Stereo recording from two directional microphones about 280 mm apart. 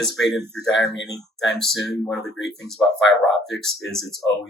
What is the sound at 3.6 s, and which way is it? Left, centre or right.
Speech, centre.